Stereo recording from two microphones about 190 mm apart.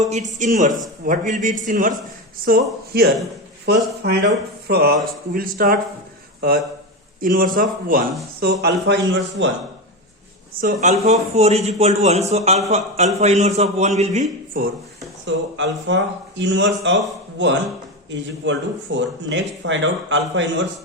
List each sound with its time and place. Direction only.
0.0 s a man's voice: 40° right (ahead or behind)
7.2 s speech: 45° right (ahead or behind)
8.6 s speech: 70° right (ahead or behind)
10.5 s a man's voice: 50° right (ahead or behind)
15.3 s speech: 70° right (ahead or behind)